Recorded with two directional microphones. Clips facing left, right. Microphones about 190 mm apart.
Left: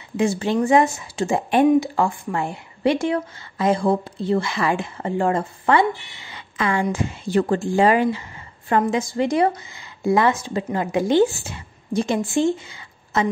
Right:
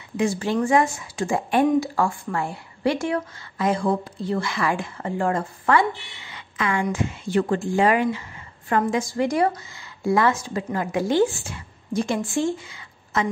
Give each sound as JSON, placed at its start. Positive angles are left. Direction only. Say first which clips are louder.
{"t": 0.2, "sound": "speech", "louder": "left 2 dB", "side_deg": 25}